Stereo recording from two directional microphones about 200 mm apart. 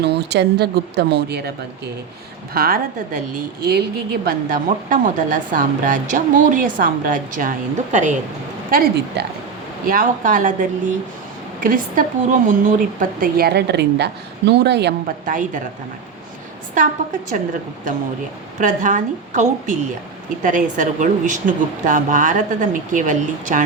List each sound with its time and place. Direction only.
0.0 s speech: 55° right (ahead or behind)
2.5 s a woman's voice: 45° right (ahead or behind)
9.2 s speech: 55° right (ahead or behind)
9.8 s a woman's voice: 45° right (ahead or behind)
18.6 s a woman's voice: 40° right (ahead or behind)